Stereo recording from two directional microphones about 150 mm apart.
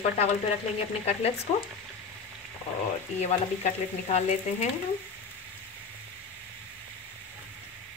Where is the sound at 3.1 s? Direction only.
45° left (ahead or behind).